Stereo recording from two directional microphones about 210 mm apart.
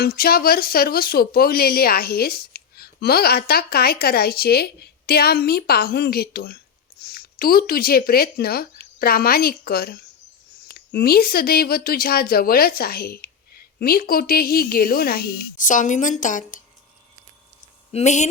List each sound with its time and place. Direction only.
0.0 s speech: 45° left (ahead or behind)
17.9 s speech: 35° left (ahead or behind)